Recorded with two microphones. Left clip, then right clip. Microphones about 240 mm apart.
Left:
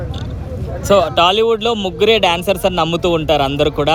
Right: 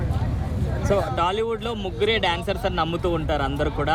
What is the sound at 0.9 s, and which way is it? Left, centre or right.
A man's voice, left.